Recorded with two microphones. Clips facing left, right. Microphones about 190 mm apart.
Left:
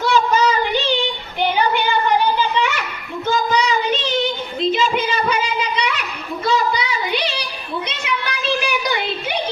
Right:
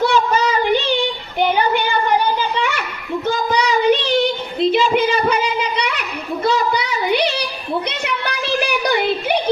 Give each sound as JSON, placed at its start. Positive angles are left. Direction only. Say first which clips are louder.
{"t": 0.0, "sound": "child singing", "louder": "even", "side_deg": -55}
{"t": 3.2, "sound": "child singing", "louder": "left 1 dB", "side_deg": -60}
{"t": 6.4, "sound": "a sound", "louder": "right 1 dB", "side_deg": -55}